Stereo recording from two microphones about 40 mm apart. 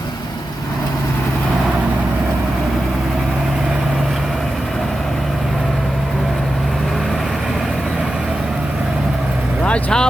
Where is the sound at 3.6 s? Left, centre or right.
Right.